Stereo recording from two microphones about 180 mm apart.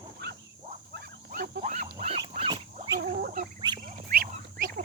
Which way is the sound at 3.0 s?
60° right (ahead or behind).